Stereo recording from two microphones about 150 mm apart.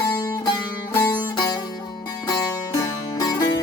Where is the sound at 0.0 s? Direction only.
25° left (ahead or behind).